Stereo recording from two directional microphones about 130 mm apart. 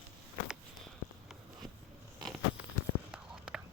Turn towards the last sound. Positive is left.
turn(degrees=-5)  # may be behind; listen again after turning